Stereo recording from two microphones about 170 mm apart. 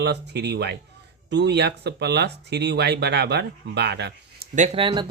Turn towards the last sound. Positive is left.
turn(degrees=-30)  # may be behind; listen again after turning